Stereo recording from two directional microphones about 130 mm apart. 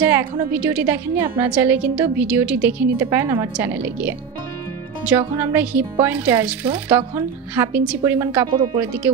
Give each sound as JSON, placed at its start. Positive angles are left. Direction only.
{"t": 0.0, "sound": "a woman's voice", "side_deg": -15}
{"t": 5.3, "sound": "a woman's voice", "side_deg": -15}
{"t": 8.5, "sound": "speech", "side_deg": -35}